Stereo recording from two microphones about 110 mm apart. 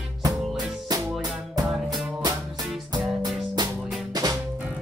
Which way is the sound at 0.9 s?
35° right (ahead or behind).